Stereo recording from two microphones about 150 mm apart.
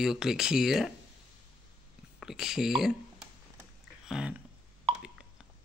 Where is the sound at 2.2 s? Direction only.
5° right (ahead or behind).